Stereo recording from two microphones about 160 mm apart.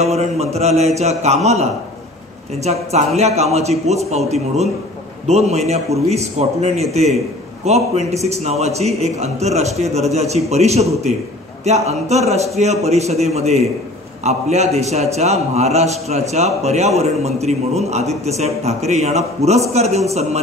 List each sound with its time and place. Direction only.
0.0 s a man's voice: 40° right (ahead or behind)